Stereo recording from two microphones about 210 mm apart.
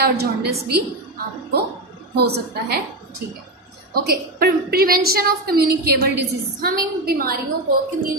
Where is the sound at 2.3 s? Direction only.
50° right (ahead or behind).